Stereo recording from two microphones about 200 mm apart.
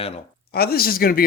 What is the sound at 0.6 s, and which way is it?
Speech, 50° left (ahead or behind).